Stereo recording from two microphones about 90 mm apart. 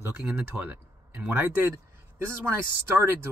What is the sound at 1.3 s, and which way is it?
Speech, 25° right (ahead or behind).